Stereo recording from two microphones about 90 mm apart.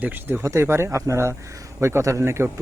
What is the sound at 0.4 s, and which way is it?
Speech, 30° right (ahead or behind).